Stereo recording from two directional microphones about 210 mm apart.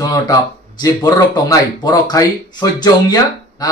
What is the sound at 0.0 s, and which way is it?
Speech, 15° left (ahead or behind).